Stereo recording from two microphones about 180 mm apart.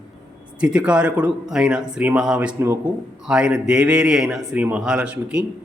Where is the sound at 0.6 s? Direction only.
5° right (ahead or behind).